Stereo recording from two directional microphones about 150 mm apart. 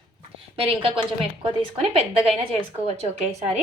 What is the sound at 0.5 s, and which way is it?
A woman's voice, 40° right (ahead or behind).